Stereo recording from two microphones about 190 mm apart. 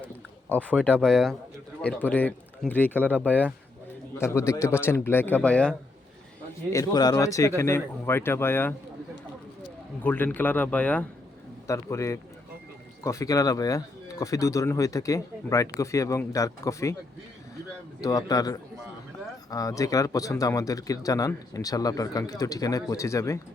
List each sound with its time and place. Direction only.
0.0 s speech: 5° left (ahead or behind)
6.7 s speech: 20° left (ahead or behind)
10.0 s speech: 10° left (ahead or behind)
18.0 s a man's voice: 20° left (ahead or behind)